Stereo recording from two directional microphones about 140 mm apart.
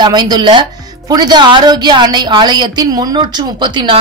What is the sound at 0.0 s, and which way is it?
Speech, 30° right (ahead or behind).